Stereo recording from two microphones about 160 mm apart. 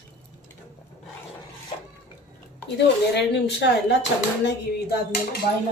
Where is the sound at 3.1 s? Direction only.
90° left.